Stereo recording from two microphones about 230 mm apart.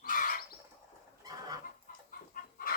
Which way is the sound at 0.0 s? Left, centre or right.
Left.